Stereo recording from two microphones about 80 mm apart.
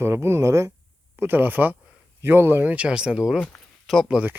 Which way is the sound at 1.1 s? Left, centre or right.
Right.